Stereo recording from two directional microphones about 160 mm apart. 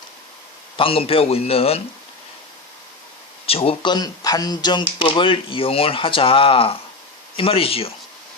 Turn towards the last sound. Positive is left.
turn(degrees=35)  # may be behind; listen again after turning